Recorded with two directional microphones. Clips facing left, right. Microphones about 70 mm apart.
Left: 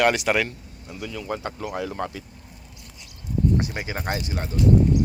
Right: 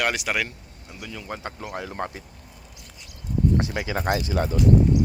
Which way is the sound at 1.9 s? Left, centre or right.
Right.